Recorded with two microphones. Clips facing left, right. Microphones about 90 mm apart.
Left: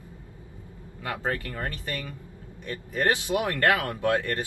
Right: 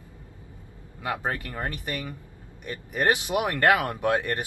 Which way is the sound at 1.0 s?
20° right (ahead or behind).